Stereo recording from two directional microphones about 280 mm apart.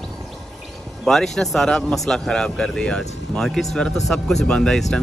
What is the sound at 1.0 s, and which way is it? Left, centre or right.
A man's voice, centre.